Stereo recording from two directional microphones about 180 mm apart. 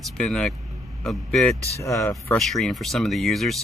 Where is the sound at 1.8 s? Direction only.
15° left (ahead or behind).